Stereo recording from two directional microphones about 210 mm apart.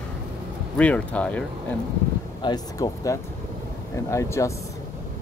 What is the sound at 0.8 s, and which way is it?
Speech, 5° left (ahead or behind).